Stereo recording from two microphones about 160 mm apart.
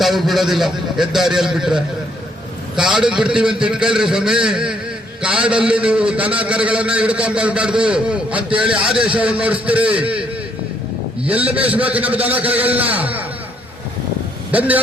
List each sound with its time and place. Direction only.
0.0 s a man's voice: centre (ahead or behind)